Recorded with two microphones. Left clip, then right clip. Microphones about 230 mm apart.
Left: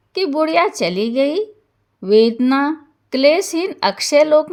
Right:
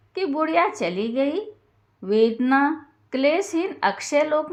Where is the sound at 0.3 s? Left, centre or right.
Left.